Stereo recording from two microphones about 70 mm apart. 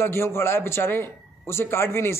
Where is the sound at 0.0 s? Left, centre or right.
Left.